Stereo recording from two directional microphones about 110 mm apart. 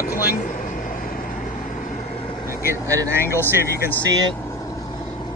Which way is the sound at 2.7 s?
25° right (ahead or behind).